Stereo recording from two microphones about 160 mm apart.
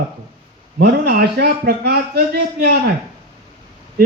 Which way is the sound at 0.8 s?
80° right.